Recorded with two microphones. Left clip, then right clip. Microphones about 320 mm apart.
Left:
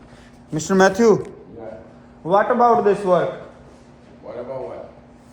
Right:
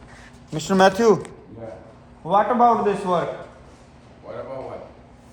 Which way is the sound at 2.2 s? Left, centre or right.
Centre.